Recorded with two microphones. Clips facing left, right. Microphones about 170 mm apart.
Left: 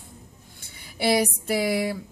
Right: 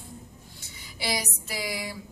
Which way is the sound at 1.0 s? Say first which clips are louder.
Left 10 dB; 55° left (ahead or behind).